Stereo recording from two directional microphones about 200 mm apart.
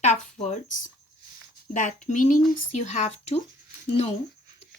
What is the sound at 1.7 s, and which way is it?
A woman's voice, 40° left (ahead or behind).